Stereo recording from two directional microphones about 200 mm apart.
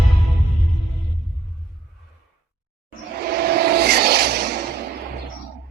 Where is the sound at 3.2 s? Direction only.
50° right (ahead or behind).